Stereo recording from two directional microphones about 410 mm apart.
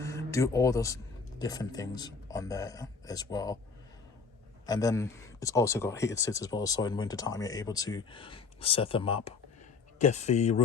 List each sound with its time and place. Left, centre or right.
0.0 s speech: centre
4.6 s speech: centre